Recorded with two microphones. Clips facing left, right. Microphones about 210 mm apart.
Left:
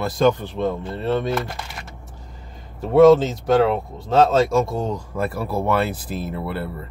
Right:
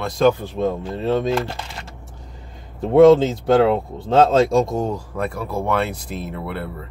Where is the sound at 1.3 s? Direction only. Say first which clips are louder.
Right 3 dB; 30° right (ahead or behind).